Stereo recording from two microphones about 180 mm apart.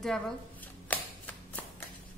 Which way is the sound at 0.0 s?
5° left (ahead or behind).